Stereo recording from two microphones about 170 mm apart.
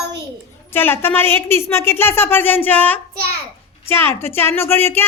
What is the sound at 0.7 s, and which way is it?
A woman's voice, 15° left (ahead or behind).